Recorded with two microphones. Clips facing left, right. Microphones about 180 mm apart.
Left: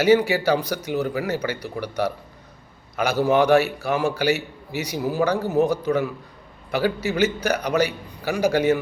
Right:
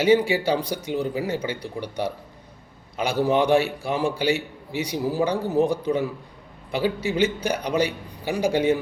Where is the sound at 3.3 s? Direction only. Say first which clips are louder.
Left 3 dB; 30° right (ahead or behind).